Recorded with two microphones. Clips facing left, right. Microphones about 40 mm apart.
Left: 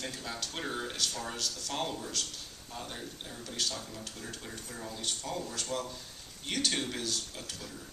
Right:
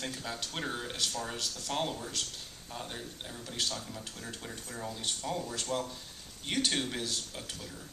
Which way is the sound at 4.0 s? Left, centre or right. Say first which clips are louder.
Even; right.